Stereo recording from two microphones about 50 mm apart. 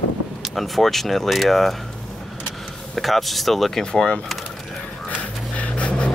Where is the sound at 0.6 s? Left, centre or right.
Centre.